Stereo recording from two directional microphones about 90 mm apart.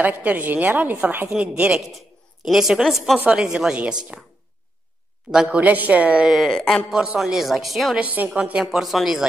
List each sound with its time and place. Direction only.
0.0 s a woman's voice: 20° right (ahead or behind)
1.9 s a woman's voice: centre (ahead or behind)
3.5 s a woman's voice: 10° right (ahead or behind)
5.3 s a woman's voice: 10° right (ahead or behind); by 6.8 s 5° left (ahead or behind)
6.9 s speech: 5° right (ahead or behind)
8.0 s a woman's voice: 20° right (ahead or behind)